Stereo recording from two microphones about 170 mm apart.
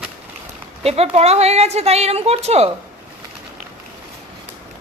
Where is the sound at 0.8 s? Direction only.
35° right (ahead or behind).